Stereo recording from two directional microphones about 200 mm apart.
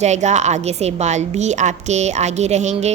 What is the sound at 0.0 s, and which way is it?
A woman's voice, 35° right (ahead or behind).